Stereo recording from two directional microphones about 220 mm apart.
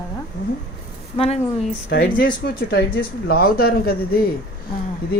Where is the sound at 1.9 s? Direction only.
40° left (ahead or behind).